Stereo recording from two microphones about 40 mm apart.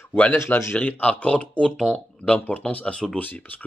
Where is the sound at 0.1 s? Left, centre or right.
Left.